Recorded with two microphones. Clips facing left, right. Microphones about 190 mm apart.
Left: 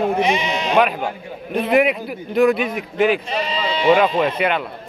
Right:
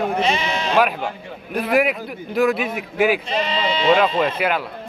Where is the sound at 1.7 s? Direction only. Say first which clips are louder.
Left 2 dB; centre (ahead or behind).